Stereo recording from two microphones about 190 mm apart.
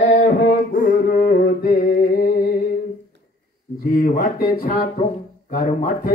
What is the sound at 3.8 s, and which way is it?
Speech, 50° left (ahead or behind).